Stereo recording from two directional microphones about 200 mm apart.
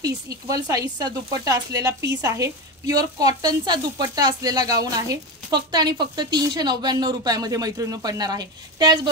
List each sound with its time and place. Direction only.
0.0 s a woman's voice: 20° right (ahead or behind)